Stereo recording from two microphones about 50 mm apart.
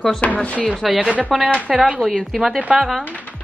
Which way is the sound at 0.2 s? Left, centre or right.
Left.